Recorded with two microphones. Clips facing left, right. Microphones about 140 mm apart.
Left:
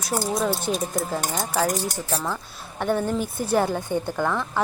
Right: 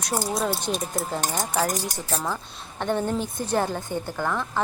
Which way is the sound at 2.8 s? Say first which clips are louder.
Left 2 dB; 10° left (ahead or behind).